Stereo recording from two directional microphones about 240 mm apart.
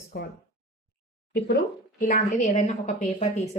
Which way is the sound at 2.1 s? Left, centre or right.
Left.